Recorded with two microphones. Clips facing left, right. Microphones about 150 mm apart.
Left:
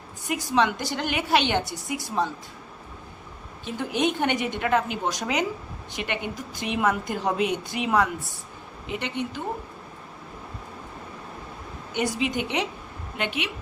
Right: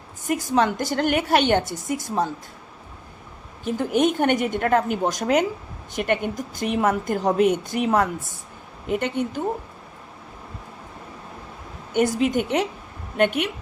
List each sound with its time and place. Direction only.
0.3 s a woman's voice: 45° right (ahead or behind)
3.6 s a woman's voice: 45° right (ahead or behind)
11.9 s a woman's voice: 45° right (ahead or behind)